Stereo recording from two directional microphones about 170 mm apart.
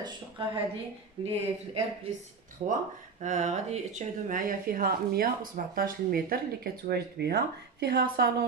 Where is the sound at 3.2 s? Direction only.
45° right (ahead or behind); by 8.2 s 70° right (ahead or behind).